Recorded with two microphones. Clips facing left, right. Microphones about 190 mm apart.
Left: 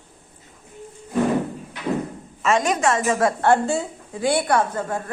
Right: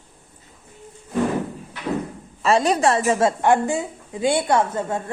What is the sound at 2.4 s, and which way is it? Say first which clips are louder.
Speech: right 2 dB; 35° right (ahead or behind).